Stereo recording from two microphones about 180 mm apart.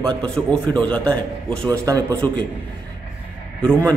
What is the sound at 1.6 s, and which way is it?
Speech, 20° right (ahead or behind).